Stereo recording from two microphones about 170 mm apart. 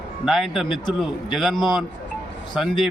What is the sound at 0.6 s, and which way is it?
Speech, 30° left (ahead or behind).